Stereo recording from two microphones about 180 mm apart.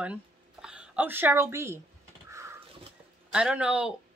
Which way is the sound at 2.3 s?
15° right (ahead or behind).